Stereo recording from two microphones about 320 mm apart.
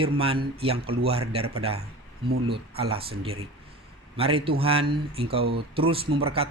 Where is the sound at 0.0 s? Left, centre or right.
Centre.